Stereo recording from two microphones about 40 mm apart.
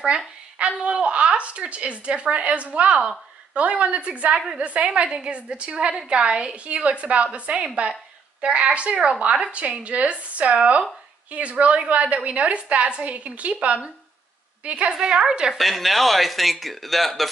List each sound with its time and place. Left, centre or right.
0.6 s a woman's voice: right
15.0 s a woman's voice: right
15.5 s speech: centre